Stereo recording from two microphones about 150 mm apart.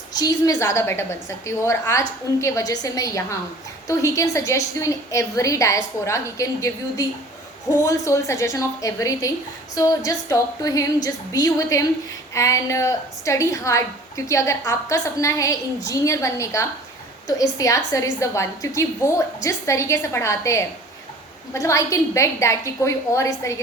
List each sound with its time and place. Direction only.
0.1 s a woman's voice: 25° left (ahead or behind)